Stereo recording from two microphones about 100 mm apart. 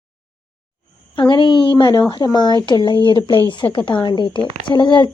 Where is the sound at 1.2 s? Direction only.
50° left (ahead or behind).